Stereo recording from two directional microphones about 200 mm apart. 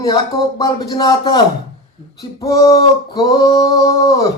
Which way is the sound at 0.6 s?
20° left (ahead or behind).